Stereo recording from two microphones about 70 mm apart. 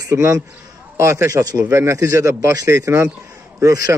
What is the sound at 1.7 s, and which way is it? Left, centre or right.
Speech, right.